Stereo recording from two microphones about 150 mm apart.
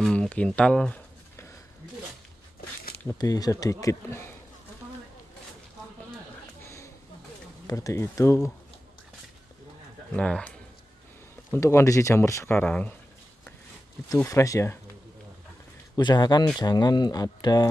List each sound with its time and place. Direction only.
0.0 s speech: 5° left (ahead or behind)
3.2 s speech: 25° left (ahead or behind)
6.6 s a sound: 15° left (ahead or behind)
7.6 s speech: 20° left (ahead or behind)
10.1 s speech: 10° left (ahead or behind)
11.5 s speech: 20° left (ahead or behind)
14.0 s speech: 20° left (ahead or behind)
16.0 s speech: 30° left (ahead or behind)